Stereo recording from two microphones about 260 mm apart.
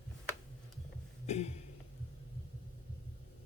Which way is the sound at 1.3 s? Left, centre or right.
Left.